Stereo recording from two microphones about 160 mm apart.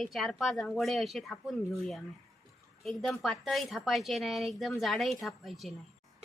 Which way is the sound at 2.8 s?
Centre (ahead or behind).